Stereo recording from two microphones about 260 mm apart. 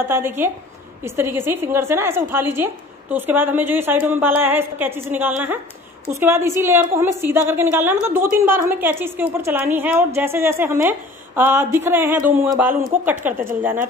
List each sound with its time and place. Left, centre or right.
0.1 s a woman's voice: centre